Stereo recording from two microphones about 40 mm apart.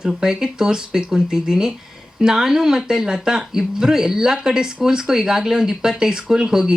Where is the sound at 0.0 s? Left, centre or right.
Centre.